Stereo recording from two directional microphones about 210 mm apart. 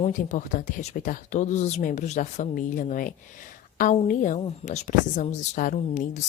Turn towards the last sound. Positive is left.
turn(degrees=35)  # may be behind; listen again after turning